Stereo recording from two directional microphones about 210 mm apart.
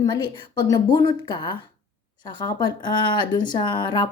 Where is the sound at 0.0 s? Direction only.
20° left (ahead or behind).